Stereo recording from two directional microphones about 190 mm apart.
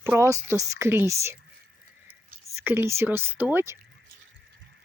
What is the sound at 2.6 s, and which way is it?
Speech, 10° right (ahead or behind).